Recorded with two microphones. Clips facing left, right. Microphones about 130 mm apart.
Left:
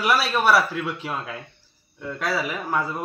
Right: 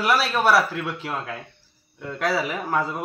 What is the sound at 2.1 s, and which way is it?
Speech, 15° right (ahead or behind).